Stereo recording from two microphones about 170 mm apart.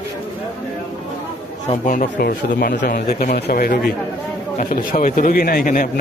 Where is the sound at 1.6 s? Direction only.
50° left (ahead or behind).